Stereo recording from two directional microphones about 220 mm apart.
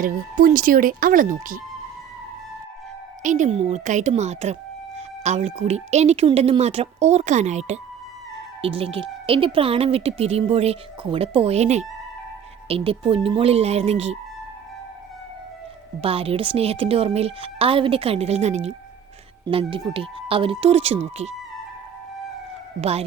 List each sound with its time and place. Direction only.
0.0 s speech: 35° right (ahead or behind)
3.2 s speech: 35° right (ahead or behind)
16.0 s speech: 25° right (ahead or behind)
22.8 s speech: 25° right (ahead or behind)